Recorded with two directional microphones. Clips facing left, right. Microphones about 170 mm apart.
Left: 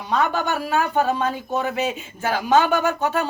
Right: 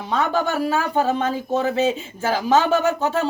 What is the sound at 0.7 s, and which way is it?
Speech, 30° right (ahead or behind).